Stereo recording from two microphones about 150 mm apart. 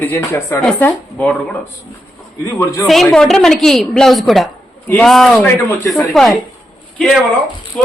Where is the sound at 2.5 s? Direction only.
20° left (ahead or behind).